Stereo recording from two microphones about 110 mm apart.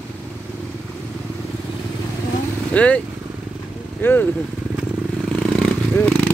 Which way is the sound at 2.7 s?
10° left (ahead or behind).